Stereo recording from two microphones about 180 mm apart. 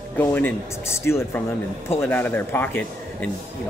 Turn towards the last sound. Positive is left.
turn(degrees=10)  # may be behind; listen again after turning